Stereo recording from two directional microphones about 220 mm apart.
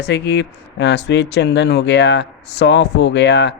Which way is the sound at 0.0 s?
50° left (ahead or behind).